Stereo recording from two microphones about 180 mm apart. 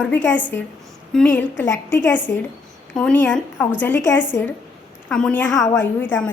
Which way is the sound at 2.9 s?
5° left (ahead or behind).